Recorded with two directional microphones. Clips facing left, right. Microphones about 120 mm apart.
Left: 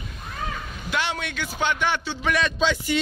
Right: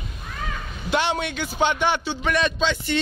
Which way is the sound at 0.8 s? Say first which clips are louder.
Right 5 dB; 25° right (ahead or behind).